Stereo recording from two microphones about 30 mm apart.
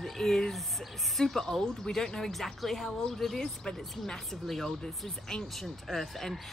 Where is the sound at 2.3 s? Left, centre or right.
Centre.